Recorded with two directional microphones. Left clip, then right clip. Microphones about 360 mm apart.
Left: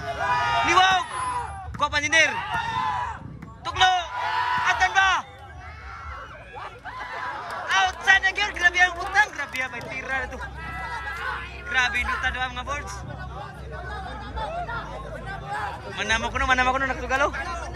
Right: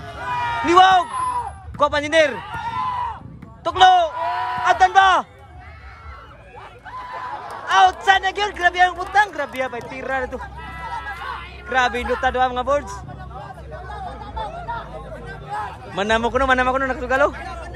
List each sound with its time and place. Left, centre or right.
0.0 s a sound: centre
3.6 s a man's voice: centre
7.6 s speech: centre
13.8 s hubbub: centre